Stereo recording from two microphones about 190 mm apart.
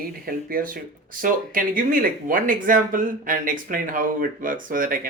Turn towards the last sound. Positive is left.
turn(degrees=-45)  # may be behind; listen again after turning